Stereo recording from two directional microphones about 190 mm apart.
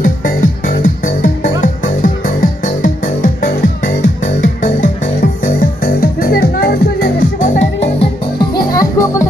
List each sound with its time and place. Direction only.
0.0 s music: 45° left (ahead or behind)
7.8 s music: 25° left (ahead or behind)